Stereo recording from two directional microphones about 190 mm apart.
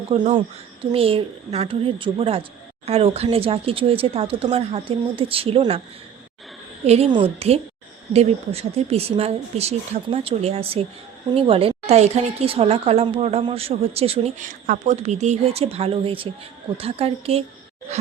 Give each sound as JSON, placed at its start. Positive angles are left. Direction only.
{"t": 0.1, "sound": "speech", "side_deg": -35}
{"t": 6.8, "sound": "a woman's voice", "side_deg": -35}